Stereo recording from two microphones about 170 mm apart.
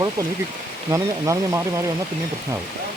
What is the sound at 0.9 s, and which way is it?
Speech, 15° right (ahead or behind).